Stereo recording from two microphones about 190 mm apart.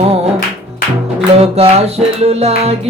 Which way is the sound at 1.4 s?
30° right (ahead or behind).